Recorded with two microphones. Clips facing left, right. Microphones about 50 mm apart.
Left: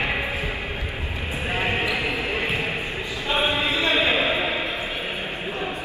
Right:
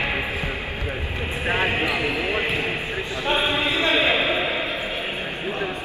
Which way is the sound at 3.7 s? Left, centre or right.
Right.